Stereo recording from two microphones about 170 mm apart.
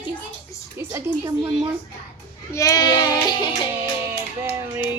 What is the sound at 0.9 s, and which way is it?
Speech, 15° right (ahead or behind).